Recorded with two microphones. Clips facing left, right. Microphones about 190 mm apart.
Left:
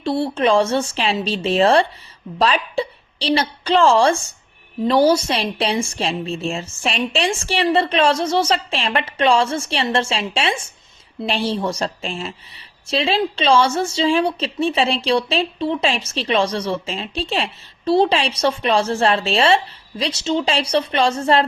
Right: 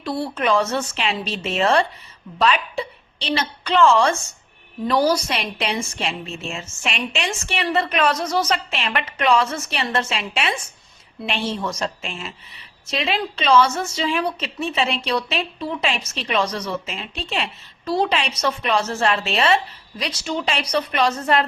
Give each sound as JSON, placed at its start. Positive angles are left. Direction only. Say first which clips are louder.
{"t": 0.0, "sound": "a woman's voice", "louder": "left 5 dB", "side_deg": 25}